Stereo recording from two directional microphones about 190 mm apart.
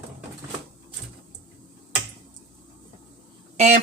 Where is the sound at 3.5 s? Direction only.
40° right (ahead or behind).